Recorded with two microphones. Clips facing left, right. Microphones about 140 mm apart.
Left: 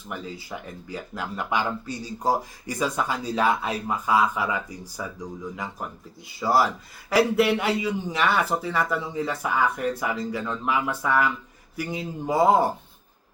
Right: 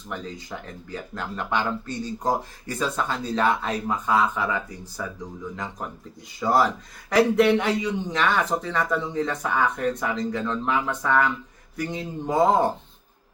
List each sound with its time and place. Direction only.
0.1 s speech: 5° left (ahead or behind)